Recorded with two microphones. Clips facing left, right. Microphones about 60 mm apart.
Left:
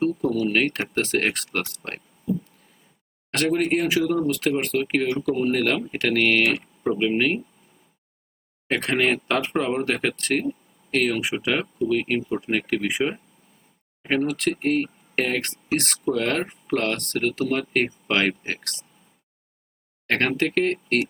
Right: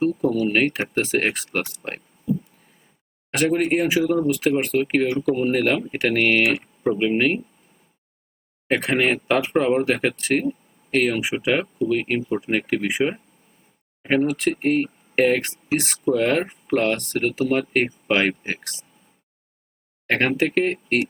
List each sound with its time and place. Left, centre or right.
0.0 s a sound: centre
0.5 s speech: centre
2.3 s a sound: centre
3.3 s speech: centre
8.6 s speech: centre
16.4 s speech: centre
16.7 s speech: centre
20.1 s speech: centre